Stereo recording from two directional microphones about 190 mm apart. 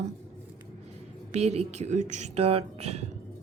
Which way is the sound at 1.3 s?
35° right (ahead or behind).